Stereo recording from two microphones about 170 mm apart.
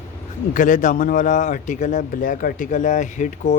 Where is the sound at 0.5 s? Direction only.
50° left (ahead or behind).